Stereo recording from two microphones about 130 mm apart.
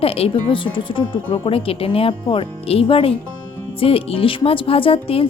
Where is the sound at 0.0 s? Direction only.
45° left (ahead or behind).